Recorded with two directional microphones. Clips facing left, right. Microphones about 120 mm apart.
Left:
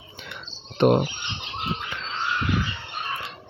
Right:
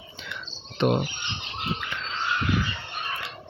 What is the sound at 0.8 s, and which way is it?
Speech, 50° left (ahead or behind).